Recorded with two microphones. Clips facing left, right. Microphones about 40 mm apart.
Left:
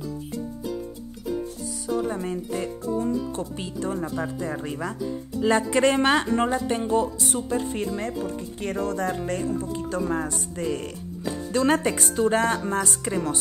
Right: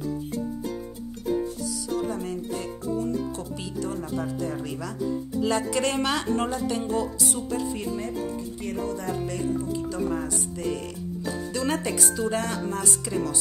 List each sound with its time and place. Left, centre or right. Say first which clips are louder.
1.9 s speech: left 4 dB; left
4.1 s speech: even; left
4.6 s speech: even; left
8.5 s speech: left 6 dB; left